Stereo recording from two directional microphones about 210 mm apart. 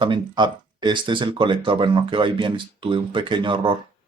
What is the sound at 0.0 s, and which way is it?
Speech, 20° right (ahead or behind).